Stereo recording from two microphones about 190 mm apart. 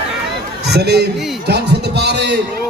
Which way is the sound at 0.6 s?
60° right (ahead or behind).